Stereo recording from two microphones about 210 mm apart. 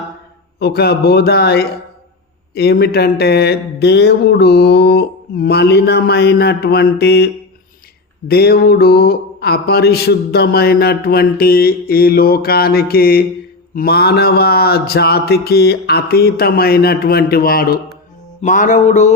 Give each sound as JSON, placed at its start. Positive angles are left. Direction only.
{"t": 0.6, "sound": "mantra", "side_deg": 50}
{"t": 8.3, "sound": "mantra", "side_deg": 50}
{"t": 18.4, "sound": "music", "side_deg": 35}